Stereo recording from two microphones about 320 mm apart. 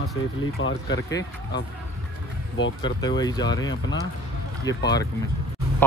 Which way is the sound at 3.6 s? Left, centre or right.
Left.